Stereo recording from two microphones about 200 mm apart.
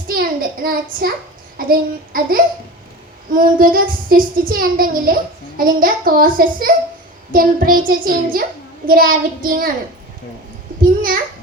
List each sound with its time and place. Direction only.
0.1 s a sound: 50° right (ahead or behind)
1.5 s a child's voice: 45° right (ahead or behind)
10.8 s a child's voice: 45° right (ahead or behind)